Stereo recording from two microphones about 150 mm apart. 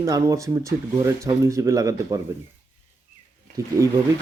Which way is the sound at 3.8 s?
20° left (ahead or behind).